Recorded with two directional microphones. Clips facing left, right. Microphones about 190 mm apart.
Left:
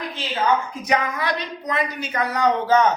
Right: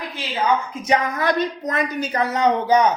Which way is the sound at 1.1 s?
45° right (ahead or behind).